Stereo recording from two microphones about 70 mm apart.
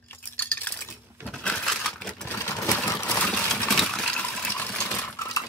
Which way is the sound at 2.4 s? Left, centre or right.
Left.